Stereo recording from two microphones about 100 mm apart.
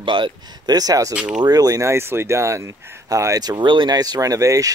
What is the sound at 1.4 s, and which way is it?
Speech, 40° right (ahead or behind).